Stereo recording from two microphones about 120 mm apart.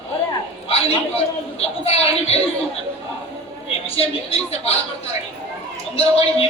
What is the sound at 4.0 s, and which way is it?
Speech, 55° left (ahead or behind).